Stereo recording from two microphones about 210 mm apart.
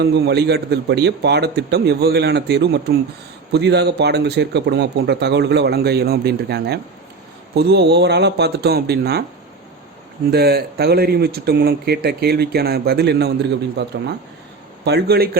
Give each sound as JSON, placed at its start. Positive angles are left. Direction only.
{"t": 0.0, "sound": "speech", "side_deg": -50}
{"t": 10.3, "sound": "speech", "side_deg": -50}